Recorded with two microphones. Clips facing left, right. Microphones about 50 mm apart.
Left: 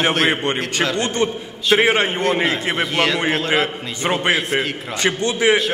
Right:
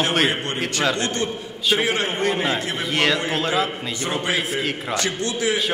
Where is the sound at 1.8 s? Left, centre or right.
Left.